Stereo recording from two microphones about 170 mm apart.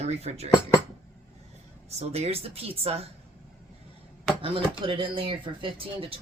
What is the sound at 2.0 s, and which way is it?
Speech, 40° right (ahead or behind).